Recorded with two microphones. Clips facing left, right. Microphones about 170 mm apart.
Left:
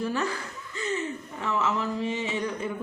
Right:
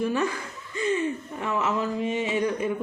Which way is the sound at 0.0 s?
15° right (ahead or behind).